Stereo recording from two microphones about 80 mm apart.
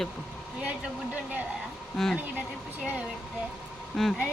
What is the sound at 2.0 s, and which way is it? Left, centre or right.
Speech, centre.